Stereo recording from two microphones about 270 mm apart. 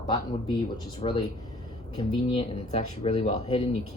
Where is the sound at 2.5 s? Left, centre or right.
Left.